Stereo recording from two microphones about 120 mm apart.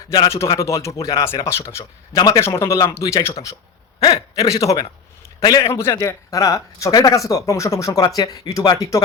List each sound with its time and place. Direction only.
0.1 s a man's voice: 25° left (ahead or behind)
5.8 s speech: 25° left (ahead or behind)